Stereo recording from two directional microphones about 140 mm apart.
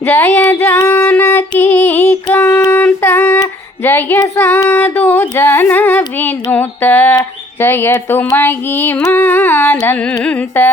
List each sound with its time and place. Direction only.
0.0 s a sound: 15° left (ahead or behind)
0.6 s female singing: 15° left (ahead or behind)
2.3 s child singing: 15° left (ahead or behind)
3.8 s a woman's voice: 15° left (ahead or behind)
4.2 s child singing: 20° left (ahead or behind)
7.6 s speech: 15° left (ahead or behind)
8.3 s a sound: 15° left (ahead or behind)